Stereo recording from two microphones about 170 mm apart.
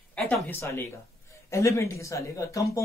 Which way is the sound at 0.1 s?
5° left (ahead or behind).